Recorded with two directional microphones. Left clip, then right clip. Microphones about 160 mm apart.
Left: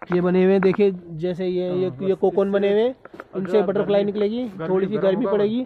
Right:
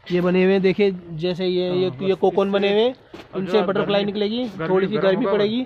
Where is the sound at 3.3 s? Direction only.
90° left.